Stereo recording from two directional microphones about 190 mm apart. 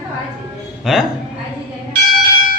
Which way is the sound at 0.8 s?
Centre (ahead or behind).